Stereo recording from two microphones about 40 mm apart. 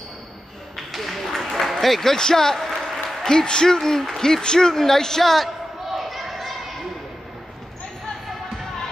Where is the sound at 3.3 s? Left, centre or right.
Centre.